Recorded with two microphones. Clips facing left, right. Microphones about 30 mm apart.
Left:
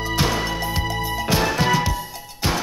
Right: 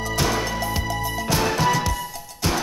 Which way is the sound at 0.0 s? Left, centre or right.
Left.